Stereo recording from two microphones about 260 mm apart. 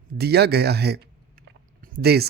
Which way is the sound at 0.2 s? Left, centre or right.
Right.